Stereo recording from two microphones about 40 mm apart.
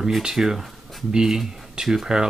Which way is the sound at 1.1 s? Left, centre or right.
Centre.